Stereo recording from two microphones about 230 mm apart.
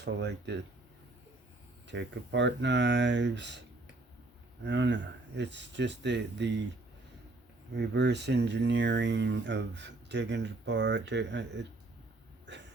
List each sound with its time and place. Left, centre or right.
0.0 s speech: right
1.9 s speech: right
4.6 s speech: right
7.8 s speech: right